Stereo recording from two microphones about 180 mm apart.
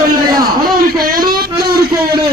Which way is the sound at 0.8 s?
55° right (ahead or behind).